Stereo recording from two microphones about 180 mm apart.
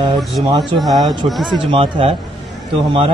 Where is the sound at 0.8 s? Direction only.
Centre (ahead or behind).